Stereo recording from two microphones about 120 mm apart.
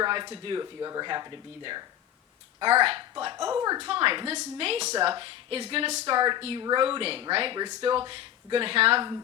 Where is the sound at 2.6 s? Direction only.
50° right (ahead or behind).